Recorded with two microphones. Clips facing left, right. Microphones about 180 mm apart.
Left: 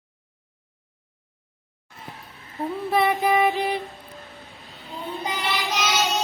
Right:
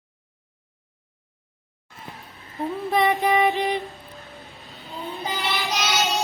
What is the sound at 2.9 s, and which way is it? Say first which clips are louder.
Music: even; 5° left (ahead or behind).